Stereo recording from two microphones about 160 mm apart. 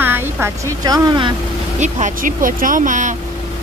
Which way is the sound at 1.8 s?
55° right (ahead or behind).